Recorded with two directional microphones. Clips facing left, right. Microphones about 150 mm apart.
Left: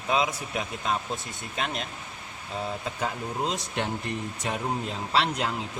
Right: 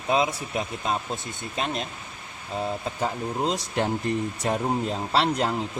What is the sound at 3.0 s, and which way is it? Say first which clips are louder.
Speech: right 3 dB; 30° right (ahead or behind).